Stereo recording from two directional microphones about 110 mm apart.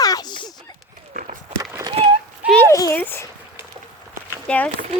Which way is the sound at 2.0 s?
65° right (ahead or behind).